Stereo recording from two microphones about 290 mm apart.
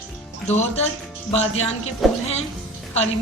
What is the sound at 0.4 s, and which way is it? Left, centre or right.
A woman's voice, left.